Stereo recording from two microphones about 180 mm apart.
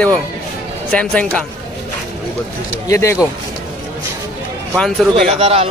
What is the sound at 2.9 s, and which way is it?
Speech, 15° left (ahead or behind).